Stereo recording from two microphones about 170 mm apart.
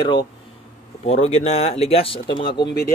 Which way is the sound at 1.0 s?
40° left (ahead or behind).